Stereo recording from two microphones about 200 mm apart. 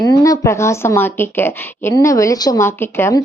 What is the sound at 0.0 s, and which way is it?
Speech, 20° left (ahead or behind).